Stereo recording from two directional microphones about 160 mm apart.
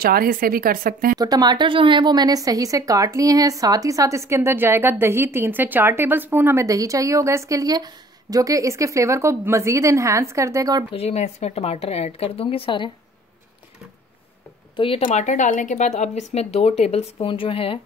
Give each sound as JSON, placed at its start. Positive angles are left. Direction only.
{"t": 0.0, "sound": "speech", "side_deg": -65}
{"t": 1.1, "sound": "speech", "side_deg": -25}
{"t": 10.9, "sound": "speech", "side_deg": 40}
{"t": 14.8, "sound": "speech", "side_deg": 30}
{"t": 15.0, "sound": "speech", "side_deg": 50}